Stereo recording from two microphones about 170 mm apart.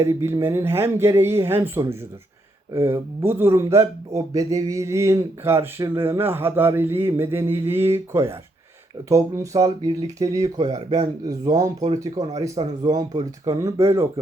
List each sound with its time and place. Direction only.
0.0 s speech: 15° right (ahead or behind)